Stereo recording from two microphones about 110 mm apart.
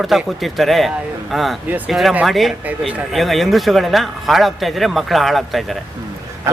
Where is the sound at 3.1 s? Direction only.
Centre (ahead or behind).